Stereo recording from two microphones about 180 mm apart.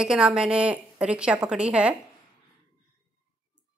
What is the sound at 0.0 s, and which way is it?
A woman's voice, 5° right (ahead or behind).